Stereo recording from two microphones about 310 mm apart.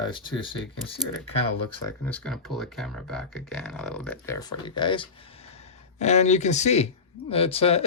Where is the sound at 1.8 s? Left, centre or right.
Centre.